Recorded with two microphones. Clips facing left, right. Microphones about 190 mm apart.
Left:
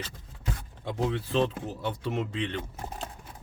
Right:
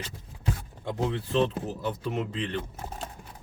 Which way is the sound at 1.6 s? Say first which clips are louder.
Right 1 dB; centre (ahead or behind).